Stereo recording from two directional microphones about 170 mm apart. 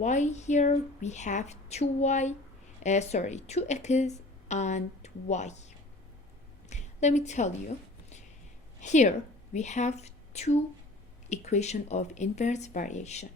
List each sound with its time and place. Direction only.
0.0 s a woman's voice: 45° left (ahead or behind)
8.8 s a woman's voice: 45° left (ahead or behind)